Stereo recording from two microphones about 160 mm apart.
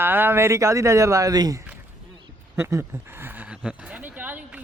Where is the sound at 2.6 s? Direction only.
15° right (ahead or behind).